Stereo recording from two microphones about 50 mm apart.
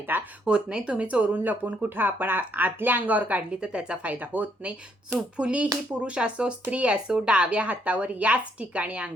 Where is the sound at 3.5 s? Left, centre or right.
Centre.